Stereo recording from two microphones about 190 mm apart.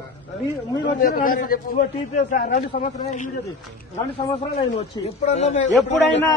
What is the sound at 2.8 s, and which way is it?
Speech, 35° left (ahead or behind).